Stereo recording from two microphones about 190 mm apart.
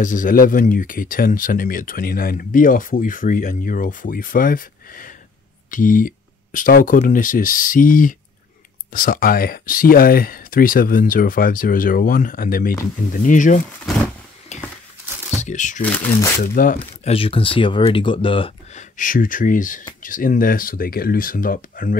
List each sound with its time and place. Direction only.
0.0 s speech: 45° left (ahead or behind)
14.5 s a sound: 35° left (ahead or behind)
15.4 s speech: 40° left (ahead or behind)
15.8 s speech: 10° left (ahead or behind)
16.5 s speech: 45° left (ahead or behind)
17.1 s speech: 30° left (ahead or behind); by 21.9 s 45° left (ahead or behind)